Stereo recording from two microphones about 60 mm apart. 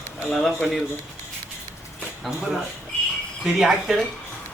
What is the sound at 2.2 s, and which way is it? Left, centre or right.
Speech, centre.